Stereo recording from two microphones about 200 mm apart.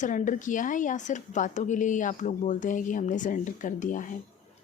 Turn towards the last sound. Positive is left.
turn(degrees=40)  # may be behind; listen again after turning